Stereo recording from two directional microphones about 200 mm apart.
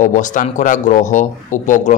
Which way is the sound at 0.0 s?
40° left (ahead or behind).